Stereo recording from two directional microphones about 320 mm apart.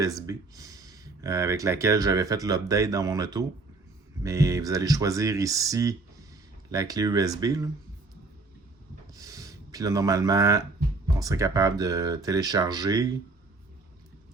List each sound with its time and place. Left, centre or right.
0.0 s speech: centre
9.1 s a sound: centre
11.2 s speech: centre